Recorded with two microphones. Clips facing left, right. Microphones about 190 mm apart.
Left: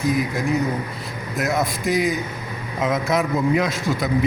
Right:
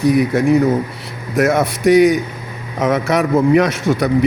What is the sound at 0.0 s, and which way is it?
A man's voice, 70° right (ahead or behind).